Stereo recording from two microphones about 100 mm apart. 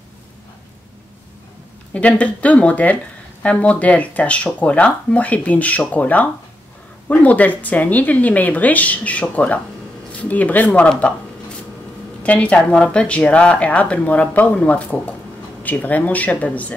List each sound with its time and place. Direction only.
2.0 s speech: 15° left (ahead or behind)
12.2 s speech: 15° left (ahead or behind)